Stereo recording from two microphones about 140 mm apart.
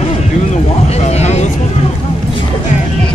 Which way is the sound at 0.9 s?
50° left (ahead or behind).